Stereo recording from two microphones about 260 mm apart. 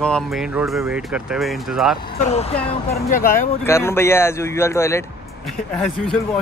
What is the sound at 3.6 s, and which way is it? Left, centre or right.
A man's voice, centre.